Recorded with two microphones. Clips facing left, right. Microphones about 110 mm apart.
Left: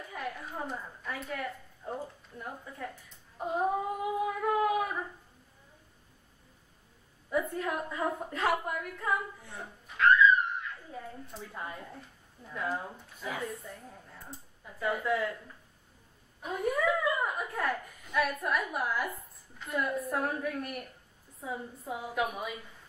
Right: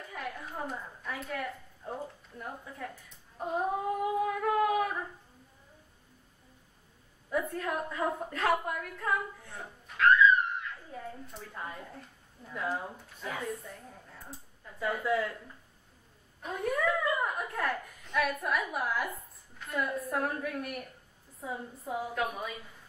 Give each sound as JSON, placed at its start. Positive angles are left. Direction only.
{"t": 0.1, "sound": "a woman's voice", "side_deg": 0}
{"t": 7.2, "sound": "a woman's voice", "side_deg": 0}
{"t": 8.0, "sound": "a woman's voice", "side_deg": -5}
{"t": 8.3, "sound": "a woman's voice", "side_deg": 5}